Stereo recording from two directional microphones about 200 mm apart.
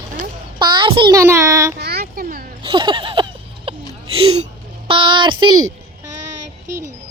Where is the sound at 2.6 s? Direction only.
25° right (ahead or behind).